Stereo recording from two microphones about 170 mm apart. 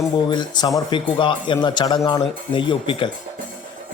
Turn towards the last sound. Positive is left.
turn(degrees=30)  # may be behind; listen again after turning